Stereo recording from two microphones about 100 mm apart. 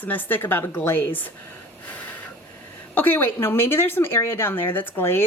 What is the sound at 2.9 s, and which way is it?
Speech, 20° left (ahead or behind).